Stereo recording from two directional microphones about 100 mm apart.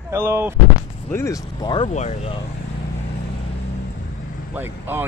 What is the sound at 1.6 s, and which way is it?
Speech, 50° left (ahead or behind).